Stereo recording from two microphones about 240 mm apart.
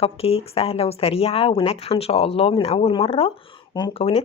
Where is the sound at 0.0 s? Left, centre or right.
Left.